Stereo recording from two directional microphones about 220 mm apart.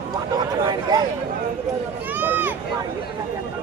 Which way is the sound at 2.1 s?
10° right (ahead or behind).